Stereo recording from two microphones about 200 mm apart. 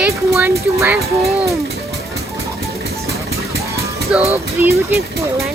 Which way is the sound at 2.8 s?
50° right (ahead or behind).